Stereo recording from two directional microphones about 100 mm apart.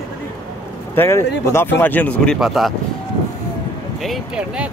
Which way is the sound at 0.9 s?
25° left (ahead or behind).